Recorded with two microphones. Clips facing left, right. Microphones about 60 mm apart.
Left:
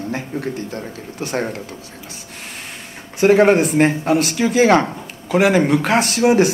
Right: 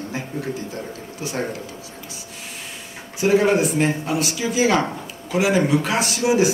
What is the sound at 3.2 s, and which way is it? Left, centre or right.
Speech, left.